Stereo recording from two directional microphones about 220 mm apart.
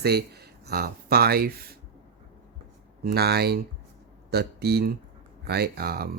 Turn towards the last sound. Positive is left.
turn(degrees=-45)  # may be behind; listen again after turning